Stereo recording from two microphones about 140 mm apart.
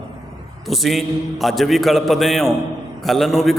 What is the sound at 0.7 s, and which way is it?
A man's voice, centre (ahead or behind).